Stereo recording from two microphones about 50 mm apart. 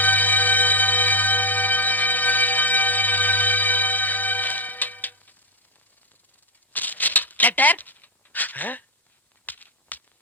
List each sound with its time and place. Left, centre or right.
0.0 s music: left
6.7 s shuffling cards: left
9.5 s a sound: left